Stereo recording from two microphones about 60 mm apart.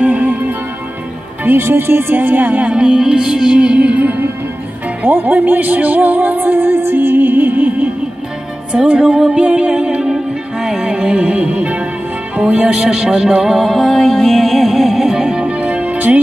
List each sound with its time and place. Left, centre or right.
0.0 s music: right
1.4 s speech: right
2.7 s music: centre; by 7.9 s right
8.8 s music: centre